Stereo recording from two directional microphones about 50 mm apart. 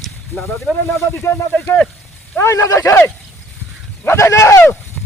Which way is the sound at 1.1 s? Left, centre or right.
Left.